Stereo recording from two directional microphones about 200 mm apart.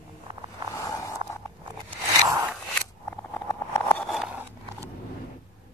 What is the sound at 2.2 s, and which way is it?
Scissors, 15° right (ahead or behind).